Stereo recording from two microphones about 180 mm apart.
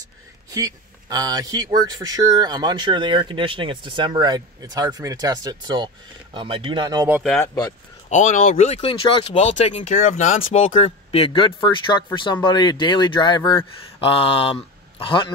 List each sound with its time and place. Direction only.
0.5 s speech: 20° right (ahead or behind)
8.1 s speech: 45° left (ahead or behind)